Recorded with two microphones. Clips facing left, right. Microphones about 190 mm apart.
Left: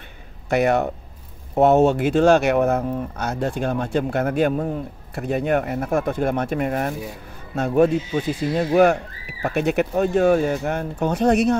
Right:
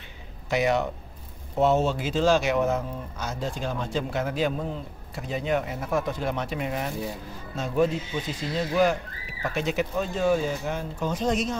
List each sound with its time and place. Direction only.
0.5 s speech: 55° left (ahead or behind)